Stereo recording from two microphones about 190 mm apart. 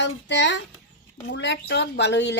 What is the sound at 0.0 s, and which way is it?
Speech, 70° left (ahead or behind).